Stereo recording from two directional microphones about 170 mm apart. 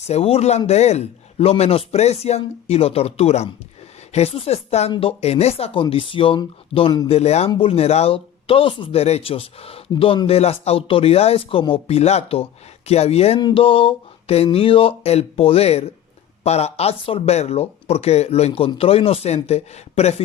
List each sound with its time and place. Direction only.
0.0 s speech: 40° left (ahead or behind)
7.1 s speech: 40° left (ahead or behind)